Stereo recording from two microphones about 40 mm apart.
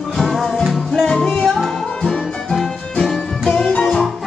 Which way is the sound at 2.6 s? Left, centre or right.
Centre.